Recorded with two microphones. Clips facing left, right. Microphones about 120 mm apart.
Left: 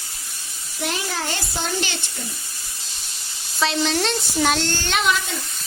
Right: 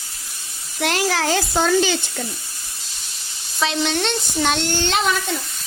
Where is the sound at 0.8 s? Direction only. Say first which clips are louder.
Right 6 dB; 90° right.